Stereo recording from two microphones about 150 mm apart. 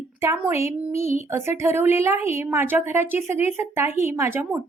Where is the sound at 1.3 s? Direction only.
20° right (ahead or behind).